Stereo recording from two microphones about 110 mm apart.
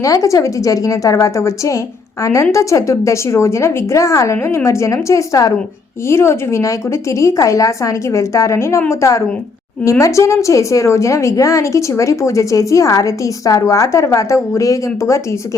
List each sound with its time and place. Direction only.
0.0 s a woman's voice: 30° left (ahead or behind)